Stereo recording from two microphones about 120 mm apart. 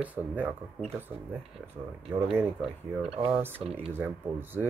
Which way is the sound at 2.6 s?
Centre (ahead or behind).